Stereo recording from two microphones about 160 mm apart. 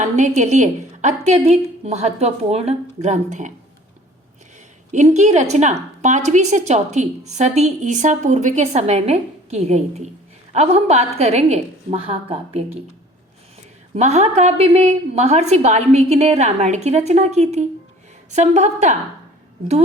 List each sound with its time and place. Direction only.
0.0 s a woman's voice: 50° right (ahead or behind)
4.9 s a woman's voice: 45° right (ahead or behind)
13.9 s a woman's voice: 45° right (ahead or behind)